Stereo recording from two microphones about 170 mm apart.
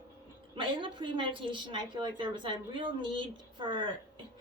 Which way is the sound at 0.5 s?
30° right (ahead or behind).